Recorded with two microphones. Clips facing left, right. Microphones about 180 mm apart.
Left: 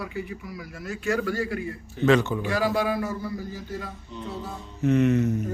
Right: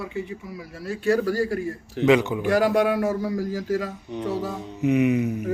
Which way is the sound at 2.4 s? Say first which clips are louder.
Right 5 dB; 60° right (ahead or behind).